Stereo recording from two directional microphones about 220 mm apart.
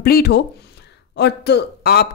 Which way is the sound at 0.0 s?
45° left (ahead or behind).